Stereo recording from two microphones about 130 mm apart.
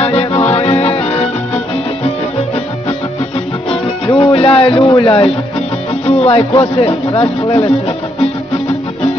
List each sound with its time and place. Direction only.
0.0 s music: 50° left (ahead or behind)
4.1 s music: 45° left (ahead or behind)
6.6 s speech: 50° left (ahead or behind)